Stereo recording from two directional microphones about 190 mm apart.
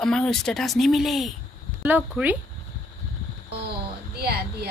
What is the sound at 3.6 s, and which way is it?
Speech, 55° right (ahead or behind).